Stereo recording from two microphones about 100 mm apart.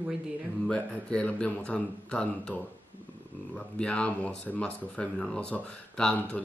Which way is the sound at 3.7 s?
10° left (ahead or behind).